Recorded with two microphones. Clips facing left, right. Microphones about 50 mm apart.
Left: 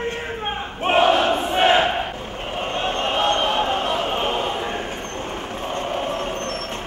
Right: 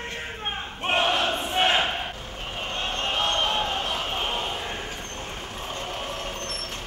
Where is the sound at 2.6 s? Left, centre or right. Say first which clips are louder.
Left 6 dB; left.